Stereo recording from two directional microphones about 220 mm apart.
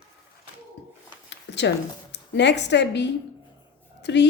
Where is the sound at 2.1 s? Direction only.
50° left (ahead or behind).